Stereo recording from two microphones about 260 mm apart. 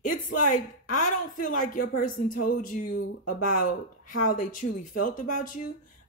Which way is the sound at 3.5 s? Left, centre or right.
Left.